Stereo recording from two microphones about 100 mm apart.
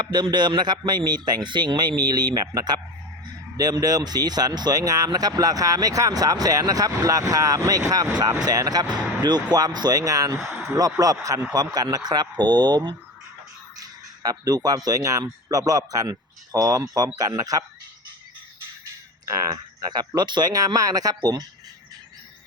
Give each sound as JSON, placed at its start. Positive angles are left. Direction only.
{"t": 0.0, "sound": "a man's voice", "side_deg": -45}
{"t": 13.7, "sound": "a sound", "side_deg": -40}
{"t": 14.8, "sound": "speech", "side_deg": -35}
{"t": 19.5, "sound": "speech", "side_deg": -45}